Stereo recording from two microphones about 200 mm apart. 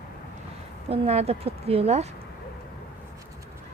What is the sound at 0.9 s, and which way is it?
A woman's voice, 30° right (ahead or behind).